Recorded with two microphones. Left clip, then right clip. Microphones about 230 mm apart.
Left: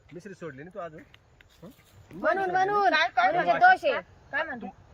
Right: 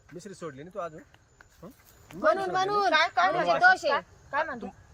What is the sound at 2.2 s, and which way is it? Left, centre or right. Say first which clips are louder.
Speech: even; centre.